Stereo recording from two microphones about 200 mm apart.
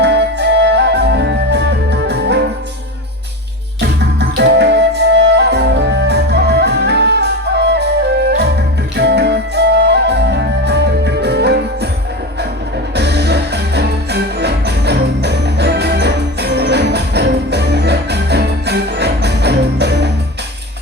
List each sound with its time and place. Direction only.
0.0 s music: 60° right (ahead or behind)
3.8 s music: 60° right (ahead or behind)
9.0 s music: 55° right (ahead or behind)
13.0 s music: 55° right (ahead or behind)